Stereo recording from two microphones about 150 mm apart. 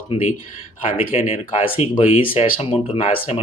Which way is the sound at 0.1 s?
50° left (ahead or behind).